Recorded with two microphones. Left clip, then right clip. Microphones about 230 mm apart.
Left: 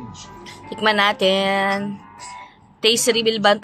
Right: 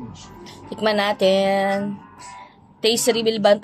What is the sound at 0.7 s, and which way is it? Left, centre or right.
A woman's voice, left.